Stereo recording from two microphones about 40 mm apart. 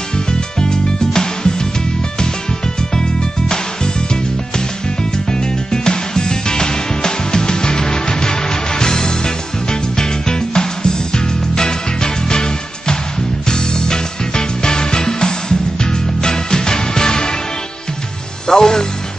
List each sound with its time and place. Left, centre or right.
0.6 s music: centre
3.0 s music: centre
5.3 s music: centre
18.5 s music: centre